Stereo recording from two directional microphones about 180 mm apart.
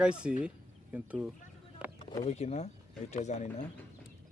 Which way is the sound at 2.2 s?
35° left (ahead or behind).